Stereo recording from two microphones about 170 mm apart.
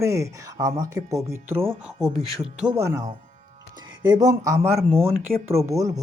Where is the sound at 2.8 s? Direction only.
15° right (ahead or behind).